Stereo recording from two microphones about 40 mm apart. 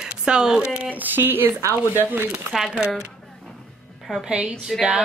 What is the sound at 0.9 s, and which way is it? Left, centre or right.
Speech, right.